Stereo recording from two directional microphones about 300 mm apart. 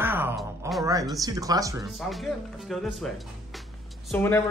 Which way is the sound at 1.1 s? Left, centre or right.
Centre.